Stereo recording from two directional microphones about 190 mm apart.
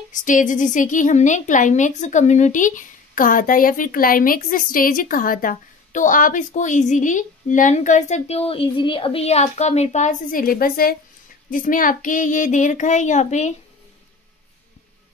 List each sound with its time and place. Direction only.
0.1 s a woman's voice: 45° left (ahead or behind)